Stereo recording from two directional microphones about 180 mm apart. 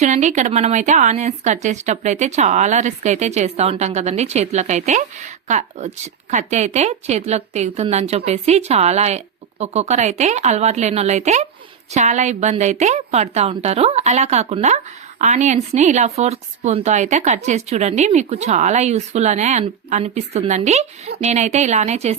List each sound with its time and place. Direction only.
0.0 s speech: 40° right (ahead or behind)